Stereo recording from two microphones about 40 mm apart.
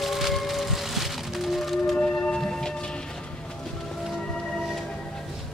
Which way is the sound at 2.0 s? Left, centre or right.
Left.